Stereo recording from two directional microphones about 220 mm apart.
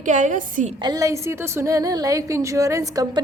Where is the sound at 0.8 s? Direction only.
15° right (ahead or behind).